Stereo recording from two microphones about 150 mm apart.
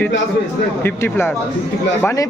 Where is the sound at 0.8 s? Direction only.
15° left (ahead or behind).